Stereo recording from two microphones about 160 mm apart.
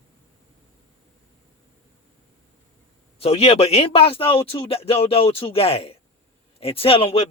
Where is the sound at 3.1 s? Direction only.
35° left (ahead or behind).